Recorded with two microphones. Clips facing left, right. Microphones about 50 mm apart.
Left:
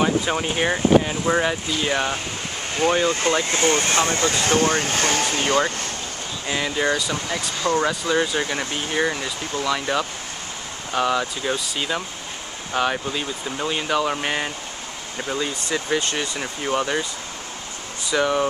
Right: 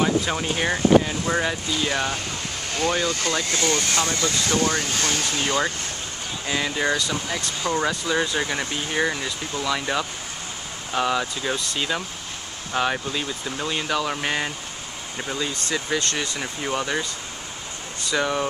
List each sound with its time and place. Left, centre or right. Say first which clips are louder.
0.0 s speech: left 1 dB; centre; by 5.6 s left
6.4 s speech: left 1 dB; centre
18.1 s speech: left 3 dB; centre